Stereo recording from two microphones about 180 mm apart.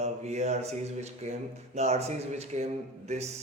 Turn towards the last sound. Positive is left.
turn(degrees=-40)  # may be behind; listen again after turning